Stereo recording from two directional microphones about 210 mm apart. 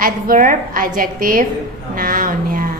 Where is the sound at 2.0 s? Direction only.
40° right (ahead or behind).